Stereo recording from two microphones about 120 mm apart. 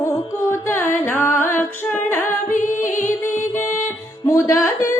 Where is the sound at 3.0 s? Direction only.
20° left (ahead or behind).